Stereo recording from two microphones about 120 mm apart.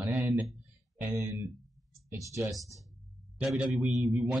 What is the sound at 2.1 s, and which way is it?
Speech, 25° right (ahead or behind).